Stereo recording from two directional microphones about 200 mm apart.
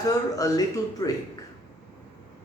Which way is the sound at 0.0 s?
20° left (ahead or behind).